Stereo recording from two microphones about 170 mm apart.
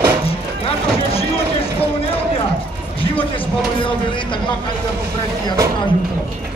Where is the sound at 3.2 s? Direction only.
30° left (ahead or behind).